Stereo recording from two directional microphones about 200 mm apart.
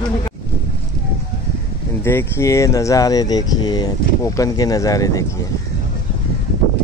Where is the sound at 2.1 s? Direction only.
10° left (ahead or behind).